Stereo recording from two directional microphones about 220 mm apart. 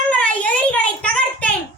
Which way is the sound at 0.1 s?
5° left (ahead or behind).